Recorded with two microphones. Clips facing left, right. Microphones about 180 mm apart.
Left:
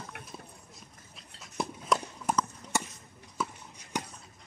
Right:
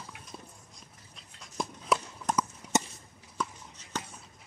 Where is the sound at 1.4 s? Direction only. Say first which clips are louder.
Left 1 dB; 5° left (ahead or behind).